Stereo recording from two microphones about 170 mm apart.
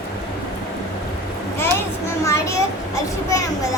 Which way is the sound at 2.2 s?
15° left (ahead or behind).